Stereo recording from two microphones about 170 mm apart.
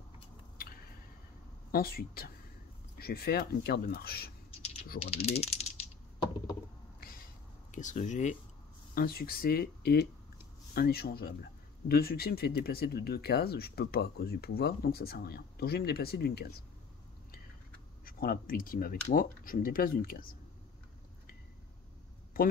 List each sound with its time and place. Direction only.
1.7 s speech: 60° left (ahead or behind)
4.9 s speech: 35° left (ahead or behind)
5.4 s a sound: 40° left (ahead or behind)
7.0 s a sound: 60° left (ahead or behind)
7.7 s speech: 45° left (ahead or behind)
8.9 s speech: 60° left (ahead or behind)
18.0 s speech: 55° left (ahead or behind)